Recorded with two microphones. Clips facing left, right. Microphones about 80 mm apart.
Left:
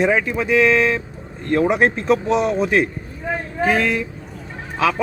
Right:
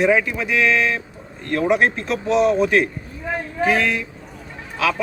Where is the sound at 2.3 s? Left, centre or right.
Left.